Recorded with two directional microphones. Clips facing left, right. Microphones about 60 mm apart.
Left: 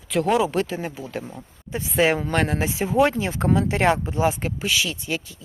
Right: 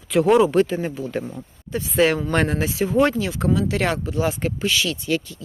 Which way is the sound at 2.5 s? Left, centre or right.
Centre.